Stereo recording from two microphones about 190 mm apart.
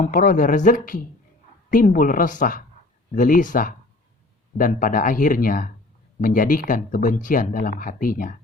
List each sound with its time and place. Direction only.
0.0 s speech: 45° left (ahead or behind)